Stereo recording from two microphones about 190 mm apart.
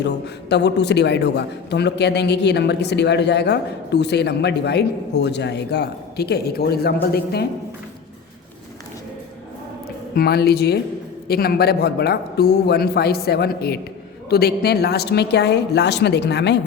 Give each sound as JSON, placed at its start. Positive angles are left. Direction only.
{"t": 0.0, "sound": "a man's voice", "side_deg": 65}
{"t": 10.2, "sound": "a man's voice", "side_deg": 55}